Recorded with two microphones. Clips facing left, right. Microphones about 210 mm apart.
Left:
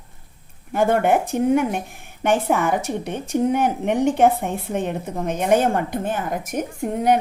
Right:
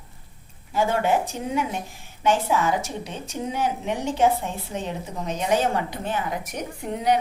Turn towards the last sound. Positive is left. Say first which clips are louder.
# left 4 dB
turn(degrees=50)  # may be behind; listen again after turning